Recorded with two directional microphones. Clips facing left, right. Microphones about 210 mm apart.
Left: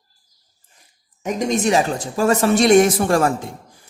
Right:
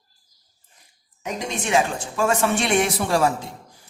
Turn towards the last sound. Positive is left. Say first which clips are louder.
# left 4 dB
turn(degrees=50)  # may be behind; listen again after turning